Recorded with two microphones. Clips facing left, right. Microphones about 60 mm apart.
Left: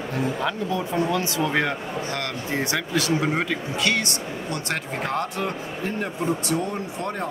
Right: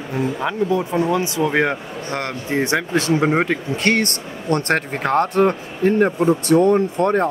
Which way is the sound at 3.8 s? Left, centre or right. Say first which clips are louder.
Right 6 dB; right.